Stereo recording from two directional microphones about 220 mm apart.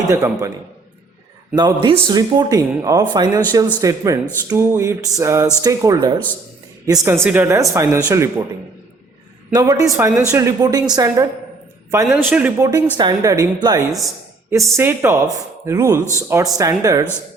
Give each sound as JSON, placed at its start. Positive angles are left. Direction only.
{"t": 0.1, "sound": "speech", "side_deg": -15}
{"t": 1.5, "sound": "speech", "side_deg": -20}
{"t": 9.5, "sound": "speech", "side_deg": -15}
{"t": 12.0, "sound": "speech", "side_deg": -5}